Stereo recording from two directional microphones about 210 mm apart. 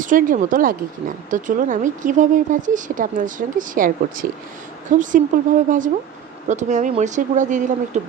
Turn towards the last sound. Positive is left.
turn(degrees=-35)  # may be behind; listen again after turning